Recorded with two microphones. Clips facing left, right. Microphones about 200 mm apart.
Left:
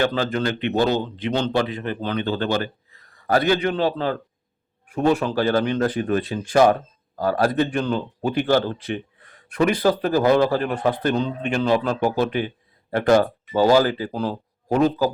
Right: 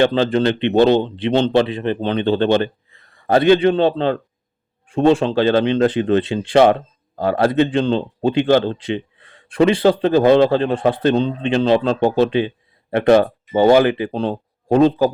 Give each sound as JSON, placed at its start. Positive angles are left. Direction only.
{"t": 0.0, "sound": "a man's voice", "side_deg": -25}